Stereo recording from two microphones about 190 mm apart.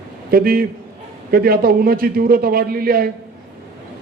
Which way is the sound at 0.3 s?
50° right (ahead or behind).